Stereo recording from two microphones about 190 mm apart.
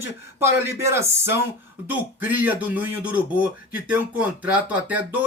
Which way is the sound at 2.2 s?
10° right (ahead or behind).